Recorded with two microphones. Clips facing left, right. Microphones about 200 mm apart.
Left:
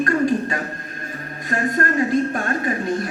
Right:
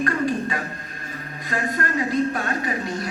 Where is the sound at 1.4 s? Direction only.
45° left (ahead or behind).